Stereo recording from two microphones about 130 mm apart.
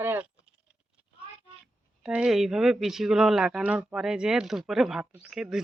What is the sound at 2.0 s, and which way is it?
Speech, 5° right (ahead or behind).